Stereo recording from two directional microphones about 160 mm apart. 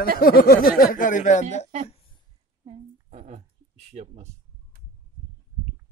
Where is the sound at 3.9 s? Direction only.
45° right (ahead or behind).